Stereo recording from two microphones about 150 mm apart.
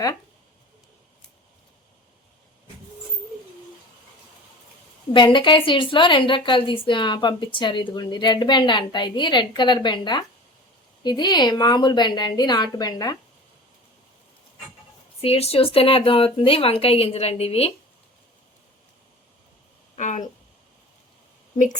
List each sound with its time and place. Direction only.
5.1 s a woman's voice: 30° left (ahead or behind)
15.2 s a woman's voice: 40° left (ahead or behind)
20.0 s speech: 55° left (ahead or behind)